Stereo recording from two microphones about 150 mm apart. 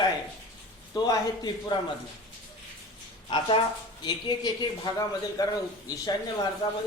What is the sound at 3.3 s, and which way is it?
Speech, 35° left (ahead or behind).